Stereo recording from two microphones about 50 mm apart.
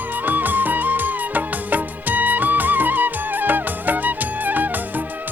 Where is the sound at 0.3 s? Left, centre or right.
Right.